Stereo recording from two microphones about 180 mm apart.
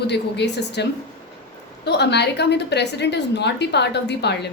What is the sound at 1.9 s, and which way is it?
A woman's voice, 65° left (ahead or behind).